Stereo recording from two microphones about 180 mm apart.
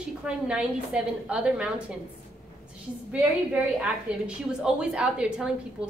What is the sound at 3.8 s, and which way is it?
A woman's voice, 5° right (ahead or behind).